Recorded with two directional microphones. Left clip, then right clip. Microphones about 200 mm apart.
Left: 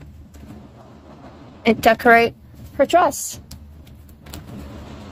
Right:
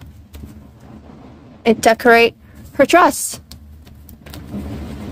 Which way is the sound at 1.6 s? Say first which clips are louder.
Right 2 dB; 20° right (ahead or behind).